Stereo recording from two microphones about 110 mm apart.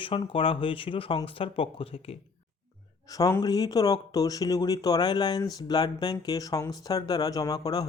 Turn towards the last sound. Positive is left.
turn(degrees=35)  # may be behind; listen again after turning